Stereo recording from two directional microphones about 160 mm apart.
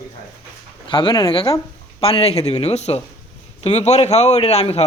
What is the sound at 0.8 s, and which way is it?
A man's voice, 30° left (ahead or behind).